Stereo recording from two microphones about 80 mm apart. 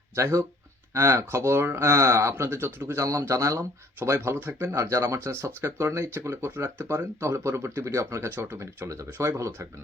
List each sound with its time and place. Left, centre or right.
0.2 s speech: right